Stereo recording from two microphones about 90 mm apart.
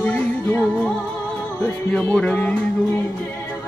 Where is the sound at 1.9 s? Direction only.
10° left (ahead or behind).